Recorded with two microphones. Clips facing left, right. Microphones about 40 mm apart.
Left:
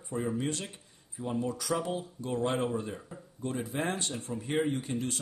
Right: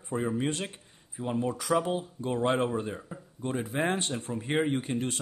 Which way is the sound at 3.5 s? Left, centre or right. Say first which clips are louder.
Right 4 dB; right.